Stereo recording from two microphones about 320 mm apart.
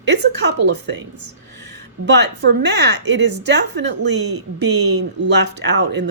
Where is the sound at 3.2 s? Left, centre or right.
Right.